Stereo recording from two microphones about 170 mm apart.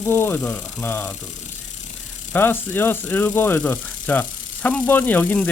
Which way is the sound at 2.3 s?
10° left (ahead or behind).